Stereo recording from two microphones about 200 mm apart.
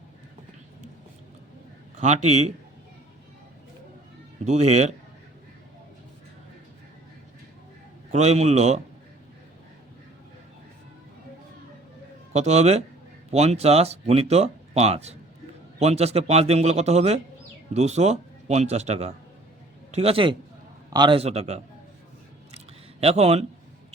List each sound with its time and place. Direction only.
2.0 s speech: 35° right (ahead or behind)
4.4 s speech: 35° right (ahead or behind)
8.1 s speech: 35° right (ahead or behind)
12.3 s a man's voice: 35° right (ahead or behind)
22.5 s a sound: 30° right (ahead or behind)